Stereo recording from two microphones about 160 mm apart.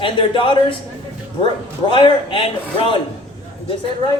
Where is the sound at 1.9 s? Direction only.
30° left (ahead or behind).